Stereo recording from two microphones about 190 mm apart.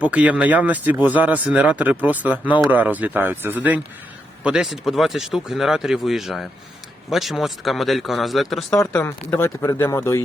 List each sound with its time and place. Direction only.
0.0 s speech: 5° right (ahead or behind)
8.8 s speech: 15° left (ahead or behind)